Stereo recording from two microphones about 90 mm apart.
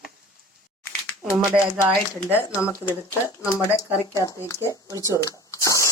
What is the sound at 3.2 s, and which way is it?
Speech, 40° left (ahead or behind).